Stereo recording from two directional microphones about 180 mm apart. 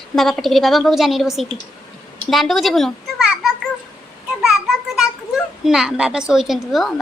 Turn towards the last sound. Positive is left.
turn(degrees=0)  # may be behind; listen again after turning